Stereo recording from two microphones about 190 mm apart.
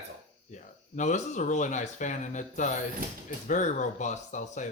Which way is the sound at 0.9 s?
40° left (ahead or behind).